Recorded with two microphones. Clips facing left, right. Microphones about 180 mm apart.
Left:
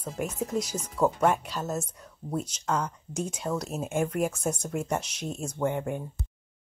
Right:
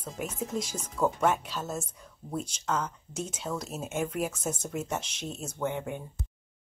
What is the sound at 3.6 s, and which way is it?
Speech, 5° right (ahead or behind).